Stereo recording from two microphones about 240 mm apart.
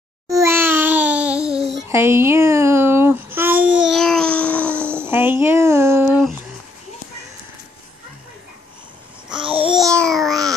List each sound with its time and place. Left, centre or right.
0.3 s babbling: centre
1.9 s speech: centre
3.3 s babbling: centre
4.7 s child singing: centre
9.4 s babbling: right
9.7 s babbling: centre